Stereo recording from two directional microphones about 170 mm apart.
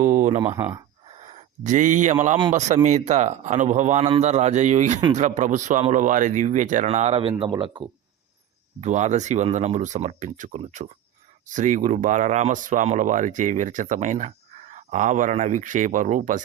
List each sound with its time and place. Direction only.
0.0 s speech: 45° right (ahead or behind)
1.2 s a sound: 45° right (ahead or behind)
2.5 s speech: 45° right (ahead or behind); by 7.9 s 25° right (ahead or behind)
8.8 s speech: 45° right (ahead or behind)